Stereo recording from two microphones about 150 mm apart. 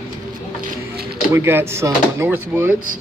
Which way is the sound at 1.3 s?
15° right (ahead or behind).